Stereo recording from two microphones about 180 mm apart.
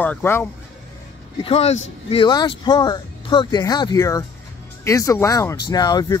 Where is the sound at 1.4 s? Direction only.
35° left (ahead or behind).